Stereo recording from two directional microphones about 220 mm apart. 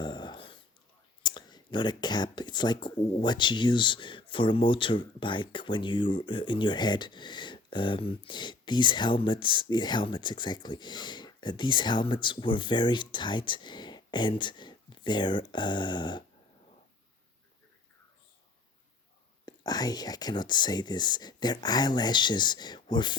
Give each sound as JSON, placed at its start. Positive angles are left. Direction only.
{"t": 0.0, "sound": "a sound", "side_deg": 20}
{"t": 1.2, "sound": "speech", "side_deg": 20}
{"t": 19.5, "sound": "speech", "side_deg": 20}